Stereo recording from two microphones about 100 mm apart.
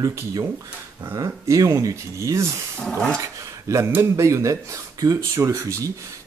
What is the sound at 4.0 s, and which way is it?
Speech, 30° right (ahead or behind).